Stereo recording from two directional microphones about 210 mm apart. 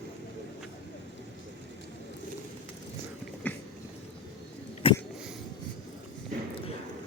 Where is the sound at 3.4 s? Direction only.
5° left (ahead or behind).